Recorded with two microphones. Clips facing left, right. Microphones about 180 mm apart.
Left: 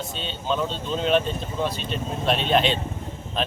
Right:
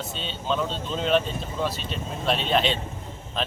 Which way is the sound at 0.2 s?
Centre (ahead or behind).